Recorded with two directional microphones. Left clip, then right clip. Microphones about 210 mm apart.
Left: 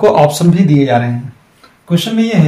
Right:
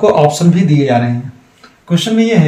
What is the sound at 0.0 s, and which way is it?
A man's voice, 25° left (ahead or behind).